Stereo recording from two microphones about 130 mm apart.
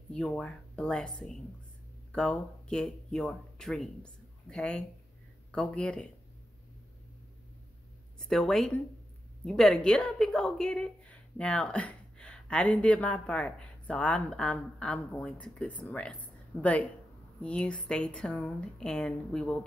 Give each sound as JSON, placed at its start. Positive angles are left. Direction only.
{"t": 0.1, "sound": "a woman's voice", "side_deg": 5}
{"t": 8.2, "sound": "a woman's voice", "side_deg": 5}